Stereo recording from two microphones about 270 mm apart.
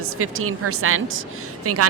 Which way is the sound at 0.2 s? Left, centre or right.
Right.